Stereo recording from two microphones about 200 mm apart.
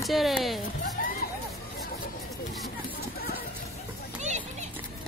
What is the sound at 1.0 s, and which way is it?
Music, 45° left (ahead or behind).